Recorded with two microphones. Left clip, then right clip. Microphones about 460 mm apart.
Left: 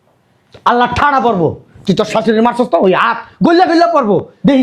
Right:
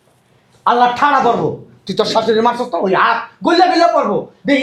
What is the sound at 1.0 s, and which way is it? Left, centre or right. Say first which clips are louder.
Speech: left 3 dB; left.